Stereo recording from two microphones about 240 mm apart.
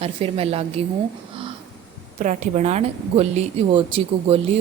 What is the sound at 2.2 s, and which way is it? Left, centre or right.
A woman's voice, right.